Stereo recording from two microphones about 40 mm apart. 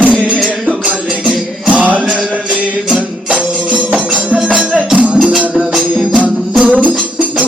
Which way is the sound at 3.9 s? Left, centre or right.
Right.